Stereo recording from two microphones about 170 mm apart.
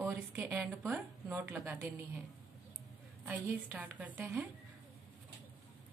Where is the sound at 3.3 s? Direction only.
10° right (ahead or behind).